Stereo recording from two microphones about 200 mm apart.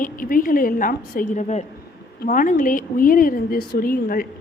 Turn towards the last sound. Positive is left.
turn(degrees=45)  # may be behind; listen again after turning